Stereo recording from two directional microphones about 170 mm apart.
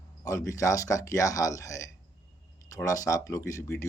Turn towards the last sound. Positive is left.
turn(degrees=15)  # may be behind; listen again after turning